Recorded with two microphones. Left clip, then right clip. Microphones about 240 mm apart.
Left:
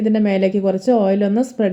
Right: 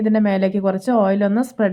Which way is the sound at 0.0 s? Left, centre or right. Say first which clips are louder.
Left 1 dB; centre.